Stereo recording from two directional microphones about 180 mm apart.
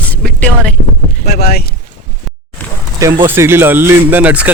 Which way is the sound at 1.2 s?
60° left (ahead or behind).